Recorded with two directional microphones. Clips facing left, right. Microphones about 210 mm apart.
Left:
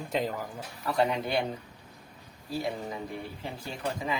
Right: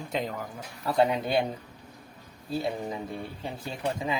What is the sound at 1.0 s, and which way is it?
Speech, 25° right (ahead or behind).